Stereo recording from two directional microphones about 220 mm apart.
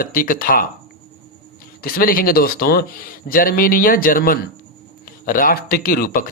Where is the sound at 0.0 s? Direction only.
40° left (ahead or behind).